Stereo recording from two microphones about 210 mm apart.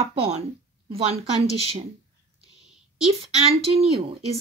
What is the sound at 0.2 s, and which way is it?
A woman's voice, 30° right (ahead or behind).